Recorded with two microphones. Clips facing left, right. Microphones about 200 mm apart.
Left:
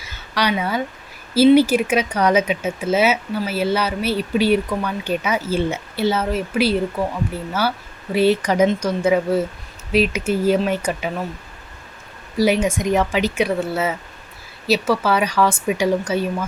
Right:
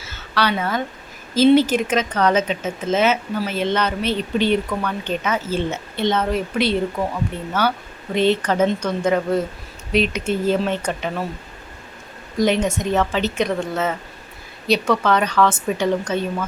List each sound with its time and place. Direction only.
0.0 s a sound: 15° left (ahead or behind)
1.3 s speech: 10° left (ahead or behind)
12.4 s speech: 10° left (ahead or behind)